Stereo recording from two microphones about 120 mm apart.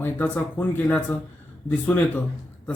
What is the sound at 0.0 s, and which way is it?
A man's voice, 15° left (ahead or behind).